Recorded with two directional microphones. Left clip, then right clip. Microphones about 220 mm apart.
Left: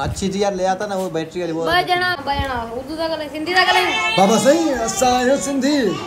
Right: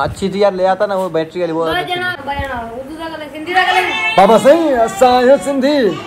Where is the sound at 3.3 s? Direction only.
45° left (ahead or behind).